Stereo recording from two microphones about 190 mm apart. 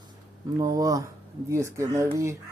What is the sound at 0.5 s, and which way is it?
Speech, 20° right (ahead or behind).